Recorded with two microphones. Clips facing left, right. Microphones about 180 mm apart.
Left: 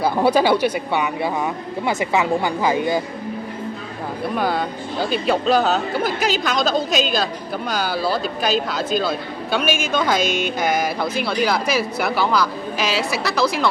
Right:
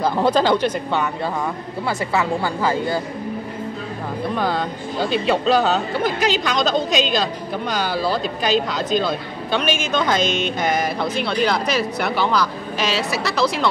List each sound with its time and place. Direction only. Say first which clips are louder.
0.0 s speech: left 1 dB; 10° left (ahead or behind)
4.4 s a man's voice: left 2 dB; 5° left (ahead or behind)